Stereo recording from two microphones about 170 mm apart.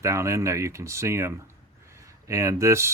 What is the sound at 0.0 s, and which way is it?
Speech, 15° right (ahead or behind).